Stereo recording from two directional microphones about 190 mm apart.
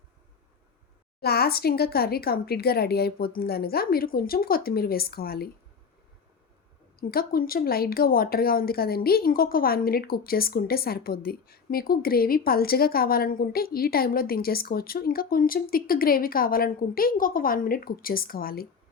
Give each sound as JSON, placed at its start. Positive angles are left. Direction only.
{"t": 1.2, "sound": "speech", "side_deg": 55}
{"t": 7.1, "sound": "speech", "side_deg": 50}